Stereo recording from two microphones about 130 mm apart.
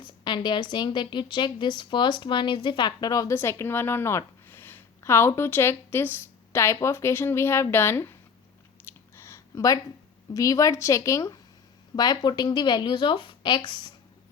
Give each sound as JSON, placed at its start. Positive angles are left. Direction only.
{"t": 0.0, "sound": "a woman's voice", "side_deg": 35}
{"t": 8.8, "sound": "a sound", "side_deg": 15}
{"t": 10.3, "sound": "a woman's voice", "side_deg": 25}